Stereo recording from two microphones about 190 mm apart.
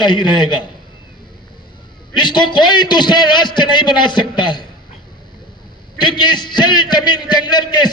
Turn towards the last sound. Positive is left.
turn(degrees=20)  # may be behind; listen again after turning